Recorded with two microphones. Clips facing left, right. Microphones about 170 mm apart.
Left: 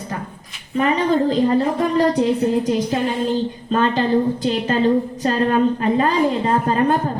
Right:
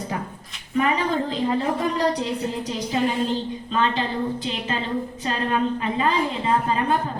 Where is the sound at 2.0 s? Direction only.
50° left (ahead or behind).